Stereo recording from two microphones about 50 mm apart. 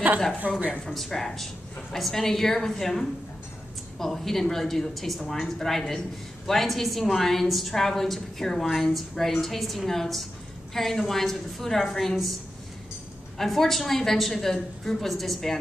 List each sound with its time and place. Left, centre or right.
0.5 s a woman's voice: centre
0.9 s a woman's voice: centre
13.4 s a woman's voice: centre